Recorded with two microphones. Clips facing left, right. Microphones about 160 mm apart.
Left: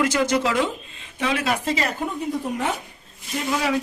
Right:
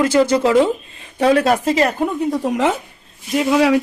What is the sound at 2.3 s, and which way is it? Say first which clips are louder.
Speech: right 7 dB; 90° right.